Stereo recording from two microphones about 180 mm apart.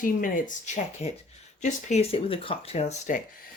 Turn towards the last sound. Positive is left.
turn(degrees=40)  # may be behind; listen again after turning